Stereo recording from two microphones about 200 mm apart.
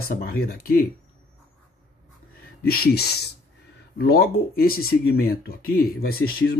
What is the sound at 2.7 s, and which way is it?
Speech, 50° left (ahead or behind).